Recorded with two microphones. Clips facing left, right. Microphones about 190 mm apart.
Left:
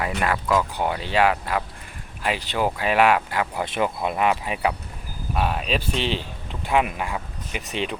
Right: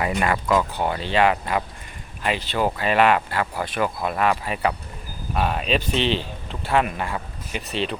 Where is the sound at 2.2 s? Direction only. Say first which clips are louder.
Right 1 dB; 10° left (ahead or behind).